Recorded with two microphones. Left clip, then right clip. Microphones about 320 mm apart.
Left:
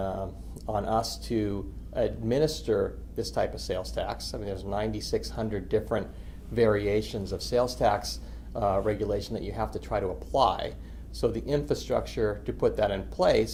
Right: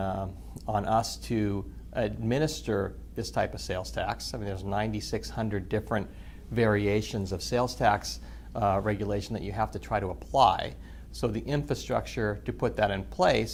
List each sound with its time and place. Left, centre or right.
0.0 s speech: right